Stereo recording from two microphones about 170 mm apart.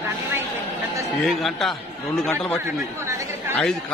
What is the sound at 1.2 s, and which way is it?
A man's voice, centre (ahead or behind).